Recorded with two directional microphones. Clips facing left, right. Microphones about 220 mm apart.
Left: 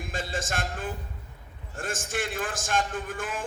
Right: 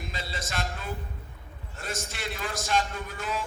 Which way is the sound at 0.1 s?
50° left (ahead or behind).